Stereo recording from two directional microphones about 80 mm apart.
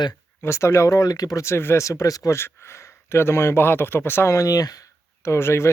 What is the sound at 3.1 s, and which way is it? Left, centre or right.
Speech, left.